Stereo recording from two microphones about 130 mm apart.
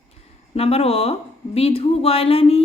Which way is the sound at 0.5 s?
50° left (ahead or behind).